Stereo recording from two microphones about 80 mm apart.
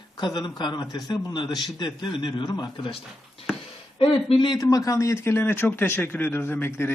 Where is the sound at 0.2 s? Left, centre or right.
Left.